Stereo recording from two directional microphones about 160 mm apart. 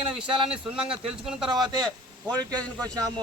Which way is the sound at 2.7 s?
5° left (ahead or behind).